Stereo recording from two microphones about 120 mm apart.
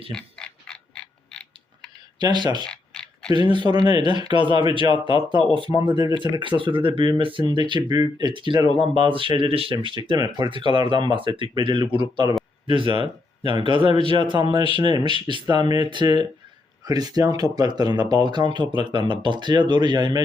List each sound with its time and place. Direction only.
0.1 s mechanisms: 5° left (ahead or behind)
2.1 s speech: 40° right (ahead or behind)
2.6 s a sound: 5° left (ahead or behind)
3.3 s speech: 40° right (ahead or behind)
4.9 s speech: 45° left (ahead or behind)
5.8 s speech: 40° right (ahead or behind)